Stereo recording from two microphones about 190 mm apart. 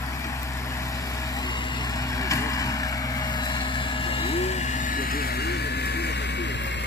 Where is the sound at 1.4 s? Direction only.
20° left (ahead or behind).